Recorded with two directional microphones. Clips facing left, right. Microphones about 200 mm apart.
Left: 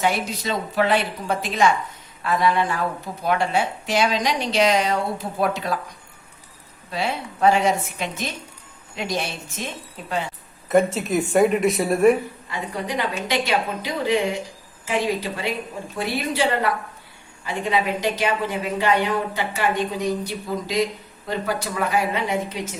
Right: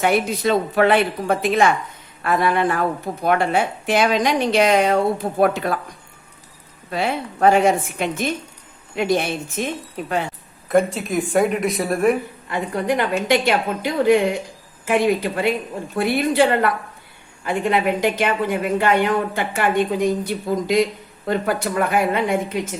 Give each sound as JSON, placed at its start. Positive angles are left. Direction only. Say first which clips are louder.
{"t": 0.0, "sound": "a woman's voice", "louder": "right 5 dB", "side_deg": -55}
{"t": 6.9, "sound": "a woman's voice", "louder": "right 3 dB", "side_deg": -55}
{"t": 10.7, "sound": "speech", "louder": "even", "side_deg": 0}
{"t": 12.5, "sound": "a woman's voice", "louder": "right 8 dB", "side_deg": -55}